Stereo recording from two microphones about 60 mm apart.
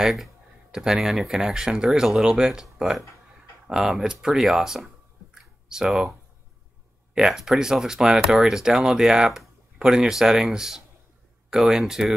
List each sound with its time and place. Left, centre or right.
0.0 s speech: centre
5.3 s a sound: centre
7.2 s speech: centre